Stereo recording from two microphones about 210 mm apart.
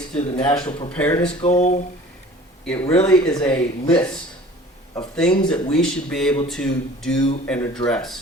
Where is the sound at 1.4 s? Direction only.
35° left (ahead or behind).